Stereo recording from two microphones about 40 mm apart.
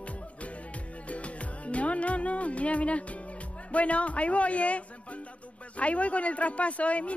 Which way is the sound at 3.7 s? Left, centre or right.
Left.